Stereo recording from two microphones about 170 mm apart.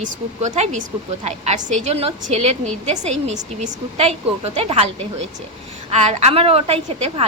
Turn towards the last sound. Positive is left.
turn(degrees=-35)  # may be behind; listen again after turning